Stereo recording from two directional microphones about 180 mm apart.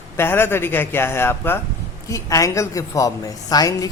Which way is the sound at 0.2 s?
10° left (ahead or behind).